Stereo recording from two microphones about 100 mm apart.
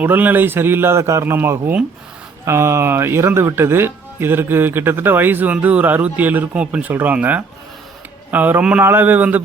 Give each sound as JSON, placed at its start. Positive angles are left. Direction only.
{"t": 0.0, "sound": "speech", "side_deg": -15}